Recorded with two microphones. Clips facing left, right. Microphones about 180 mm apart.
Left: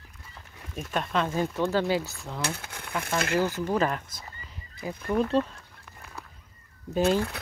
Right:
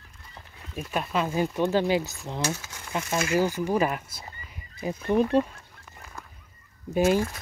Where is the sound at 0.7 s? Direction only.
5° right (ahead or behind).